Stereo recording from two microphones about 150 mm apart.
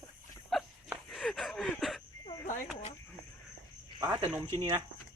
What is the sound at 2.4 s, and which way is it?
Frog, 50° left (ahead or behind).